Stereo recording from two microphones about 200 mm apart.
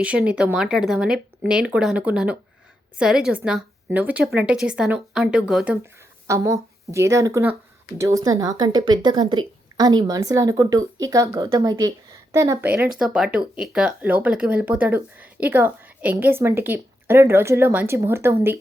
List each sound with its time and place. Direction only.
0.0 s speech: 5° right (ahead or behind)
5.8 s speech: 15° right (ahead or behind)